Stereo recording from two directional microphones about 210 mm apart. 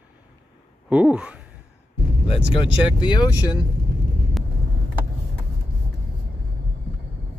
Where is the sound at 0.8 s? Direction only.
5° right (ahead or behind).